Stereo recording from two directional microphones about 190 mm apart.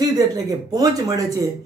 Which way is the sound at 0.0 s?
20° right (ahead or behind).